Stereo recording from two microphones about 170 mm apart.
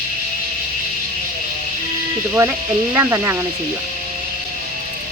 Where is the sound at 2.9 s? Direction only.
15° right (ahead or behind).